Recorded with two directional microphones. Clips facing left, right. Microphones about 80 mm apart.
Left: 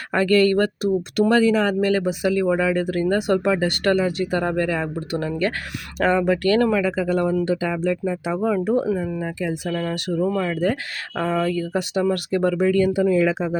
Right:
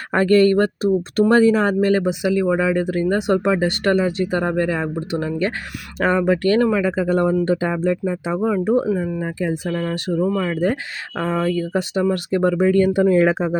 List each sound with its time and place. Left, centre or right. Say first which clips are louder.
0.1 s speech: right 3 dB; right
8.9 s speech: right 2 dB; centre
9.2 s speech: right 3 dB; right
9.6 s speech: right 2 dB; centre
9.9 s speech: right 2 dB; right
12.8 s speech: right 4 dB; right